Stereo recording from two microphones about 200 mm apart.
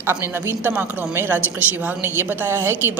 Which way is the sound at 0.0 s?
10° right (ahead or behind).